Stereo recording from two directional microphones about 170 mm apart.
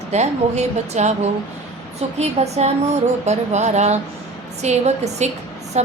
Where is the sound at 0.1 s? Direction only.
40° right (ahead or behind).